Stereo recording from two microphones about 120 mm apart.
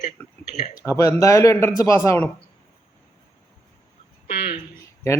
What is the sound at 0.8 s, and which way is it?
Speech, 30° left (ahead or behind).